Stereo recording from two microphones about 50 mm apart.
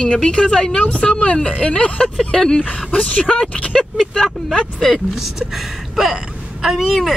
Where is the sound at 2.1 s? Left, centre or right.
Centre.